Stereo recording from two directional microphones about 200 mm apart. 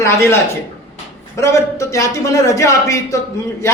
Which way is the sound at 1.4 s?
15° left (ahead or behind).